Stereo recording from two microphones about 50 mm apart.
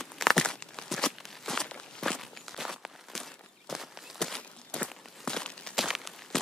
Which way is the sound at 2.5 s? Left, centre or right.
Centre.